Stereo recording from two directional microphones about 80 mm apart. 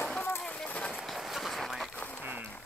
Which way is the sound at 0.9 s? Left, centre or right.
Centre.